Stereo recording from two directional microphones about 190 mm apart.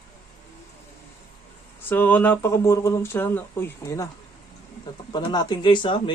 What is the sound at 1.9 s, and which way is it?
Speech, 10° left (ahead or behind).